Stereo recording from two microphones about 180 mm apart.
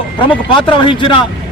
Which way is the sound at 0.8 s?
30° left (ahead or behind).